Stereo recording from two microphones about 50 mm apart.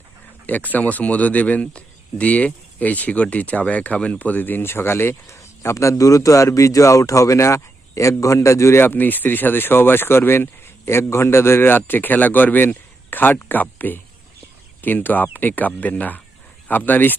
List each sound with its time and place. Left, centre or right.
0.4 s speech: left
5.4 s a man's voice: left
8.8 s speech: left